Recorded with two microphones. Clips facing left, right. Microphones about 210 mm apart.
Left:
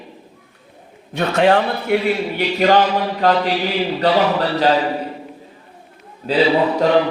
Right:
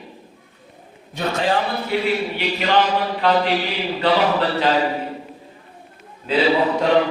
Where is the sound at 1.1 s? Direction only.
65° left (ahead or behind).